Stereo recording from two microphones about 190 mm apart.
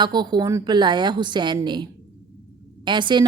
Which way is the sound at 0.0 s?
20° right (ahead or behind).